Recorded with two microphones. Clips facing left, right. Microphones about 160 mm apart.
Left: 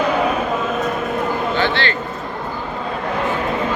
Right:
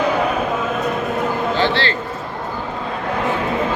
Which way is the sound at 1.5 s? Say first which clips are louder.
Right 1 dB; 30° right (ahead or behind).